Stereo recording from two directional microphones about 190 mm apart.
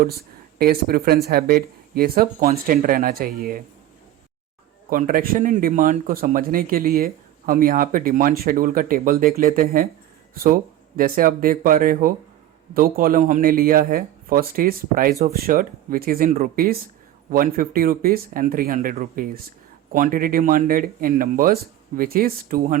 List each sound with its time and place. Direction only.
0.6 s speech: 55° right (ahead or behind)
4.9 s speech: 45° right (ahead or behind)